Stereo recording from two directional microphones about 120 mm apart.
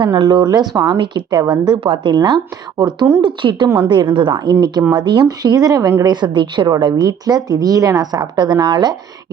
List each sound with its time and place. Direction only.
0.0 s a woman's voice: 35° right (ahead or behind)